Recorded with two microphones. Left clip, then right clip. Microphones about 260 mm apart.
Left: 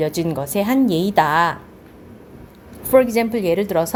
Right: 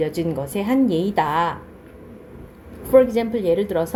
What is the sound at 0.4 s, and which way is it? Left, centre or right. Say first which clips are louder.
A woman's voice: left 3 dB; left.